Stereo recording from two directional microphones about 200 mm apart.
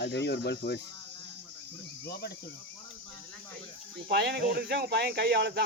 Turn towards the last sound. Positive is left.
turn(degrees=-60)  # may be behind; listen again after turning